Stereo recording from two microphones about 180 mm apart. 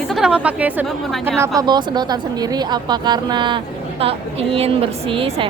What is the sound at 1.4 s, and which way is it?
A woman's voice, 20° right (ahead or behind).